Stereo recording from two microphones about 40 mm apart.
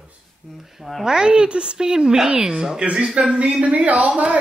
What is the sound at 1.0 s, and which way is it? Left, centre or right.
A man's voice, centre.